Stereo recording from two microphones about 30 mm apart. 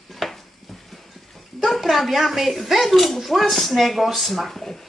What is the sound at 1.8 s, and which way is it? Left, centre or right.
Speech, centre.